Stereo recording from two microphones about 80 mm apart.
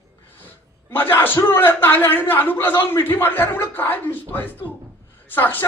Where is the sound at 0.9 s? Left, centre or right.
Left.